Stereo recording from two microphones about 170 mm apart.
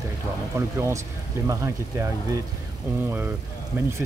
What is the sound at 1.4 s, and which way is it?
Speech, 20° right (ahead or behind).